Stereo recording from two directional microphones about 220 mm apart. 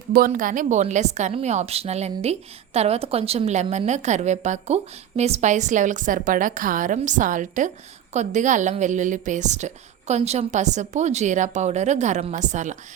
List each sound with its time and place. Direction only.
0.1 s a woman's voice: 40° right (ahead or behind)